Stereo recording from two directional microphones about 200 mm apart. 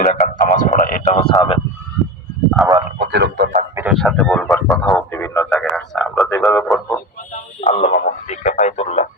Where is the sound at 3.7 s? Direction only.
10° right (ahead or behind).